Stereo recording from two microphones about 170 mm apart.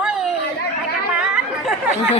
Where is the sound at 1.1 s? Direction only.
5° right (ahead or behind).